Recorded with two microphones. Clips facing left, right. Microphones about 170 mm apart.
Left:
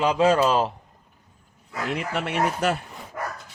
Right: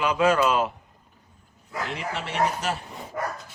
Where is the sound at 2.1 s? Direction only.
55° left (ahead or behind).